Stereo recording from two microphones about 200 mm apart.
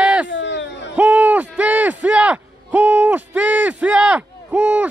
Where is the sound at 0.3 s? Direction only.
65° left (ahead or behind).